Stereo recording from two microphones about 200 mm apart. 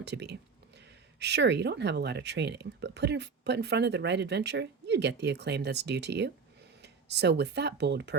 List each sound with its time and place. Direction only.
0.0 s speech: 55° right (ahead or behind)